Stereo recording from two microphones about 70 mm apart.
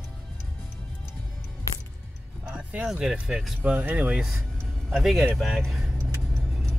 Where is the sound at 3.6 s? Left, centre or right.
Right.